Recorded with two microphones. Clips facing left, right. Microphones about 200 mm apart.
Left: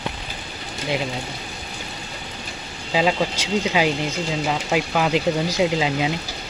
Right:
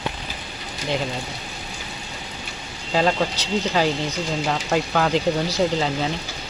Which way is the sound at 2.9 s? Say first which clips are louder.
Even; 5° left (ahead or behind).